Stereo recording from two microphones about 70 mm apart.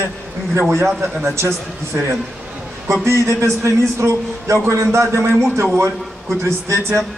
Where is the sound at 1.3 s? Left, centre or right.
Right.